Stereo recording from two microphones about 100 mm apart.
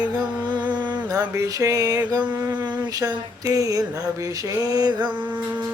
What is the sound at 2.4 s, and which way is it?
Speech, 50° right (ahead or behind).